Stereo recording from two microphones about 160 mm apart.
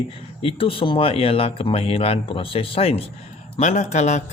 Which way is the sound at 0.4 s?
35° left (ahead or behind).